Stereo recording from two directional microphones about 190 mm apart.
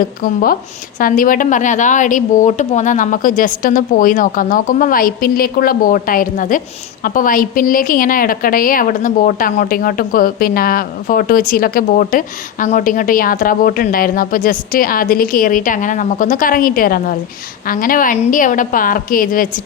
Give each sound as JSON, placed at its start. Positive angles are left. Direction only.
{"t": 0.0, "sound": "a woman's voice", "side_deg": 50}